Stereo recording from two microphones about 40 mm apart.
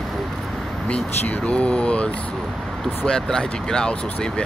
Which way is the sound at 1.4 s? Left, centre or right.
Left.